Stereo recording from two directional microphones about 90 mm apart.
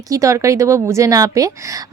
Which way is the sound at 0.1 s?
35° right (ahead or behind).